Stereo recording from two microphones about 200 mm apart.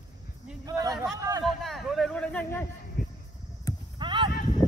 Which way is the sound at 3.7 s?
20° left (ahead or behind).